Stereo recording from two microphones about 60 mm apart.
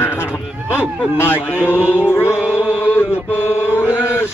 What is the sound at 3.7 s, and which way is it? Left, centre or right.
Mantra, left.